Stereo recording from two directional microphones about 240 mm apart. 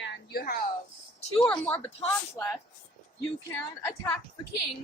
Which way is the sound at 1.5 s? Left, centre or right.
Centre.